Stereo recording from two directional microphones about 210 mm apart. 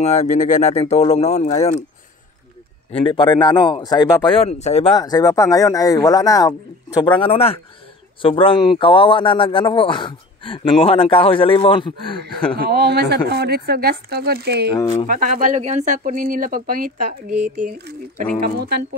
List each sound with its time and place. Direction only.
0.0 s speech: 35° left (ahead or behind)
2.9 s speech: 25° left (ahead or behind)
4.9 s speech: 20° left (ahead or behind)
12.5 s speech: 45° right (ahead or behind)
14.8 s speech: 20° left (ahead or behind)
15.0 s speech: 40° right (ahead or behind)